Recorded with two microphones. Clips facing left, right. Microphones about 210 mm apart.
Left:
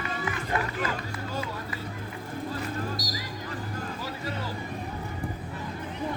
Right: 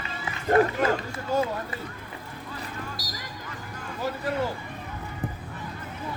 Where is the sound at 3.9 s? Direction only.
50° right (ahead or behind).